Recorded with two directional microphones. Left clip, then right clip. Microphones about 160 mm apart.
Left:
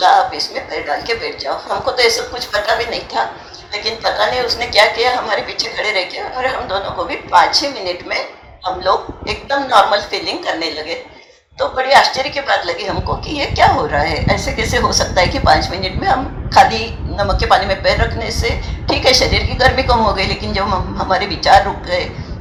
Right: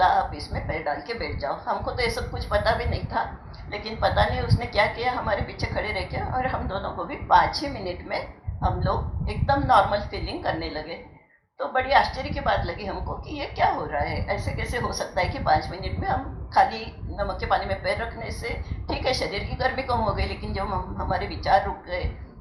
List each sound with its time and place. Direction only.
0.0 s a sound: 20° left (ahead or behind)
0.9 s speech: 20° left (ahead or behind)
4.4 s a woman's voice: 20° left (ahead or behind)